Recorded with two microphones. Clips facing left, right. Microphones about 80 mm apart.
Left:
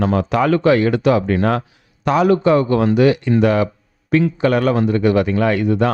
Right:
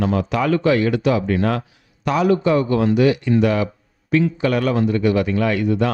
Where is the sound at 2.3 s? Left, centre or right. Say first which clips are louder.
Left 2 dB; left.